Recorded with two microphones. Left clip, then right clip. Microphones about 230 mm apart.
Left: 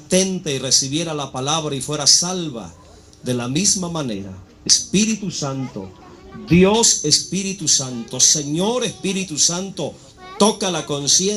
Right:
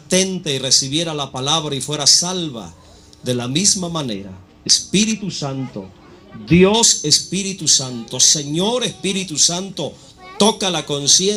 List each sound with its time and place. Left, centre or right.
0.1 s a man's voice: right